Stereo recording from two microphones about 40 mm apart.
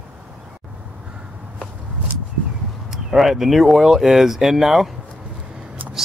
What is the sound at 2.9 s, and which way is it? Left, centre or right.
Speech, centre.